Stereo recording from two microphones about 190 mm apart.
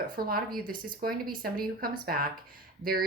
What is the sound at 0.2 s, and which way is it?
Speech, 50° right (ahead or behind).